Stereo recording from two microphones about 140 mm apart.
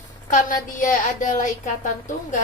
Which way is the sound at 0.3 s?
70° left (ahead or behind).